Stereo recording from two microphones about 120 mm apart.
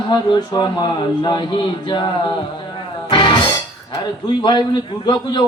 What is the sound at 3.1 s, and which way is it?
Music, 40° left (ahead or behind).